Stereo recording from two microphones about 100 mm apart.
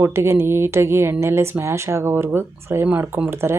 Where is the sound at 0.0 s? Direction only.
25° right (ahead or behind).